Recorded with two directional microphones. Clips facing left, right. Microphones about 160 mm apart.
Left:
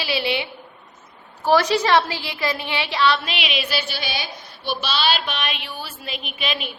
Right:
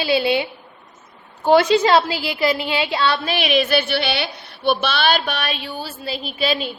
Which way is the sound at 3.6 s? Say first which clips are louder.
Right 8 dB; 55° right (ahead or behind).